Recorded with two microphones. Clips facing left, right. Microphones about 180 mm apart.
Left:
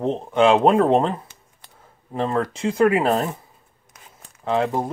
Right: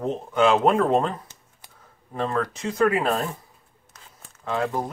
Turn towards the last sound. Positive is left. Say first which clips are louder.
# left 4 dB
turn(degrees=25)  # may be behind; listen again after turning